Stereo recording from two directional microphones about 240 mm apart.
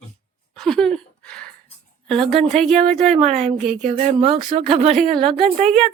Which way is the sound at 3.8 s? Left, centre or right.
Right.